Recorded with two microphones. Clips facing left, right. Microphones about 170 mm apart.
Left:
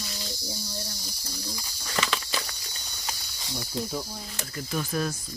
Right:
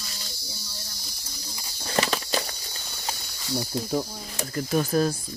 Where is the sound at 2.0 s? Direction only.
40° right (ahead or behind).